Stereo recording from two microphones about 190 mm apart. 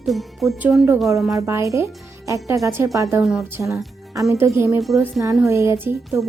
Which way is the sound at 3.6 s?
Centre (ahead or behind).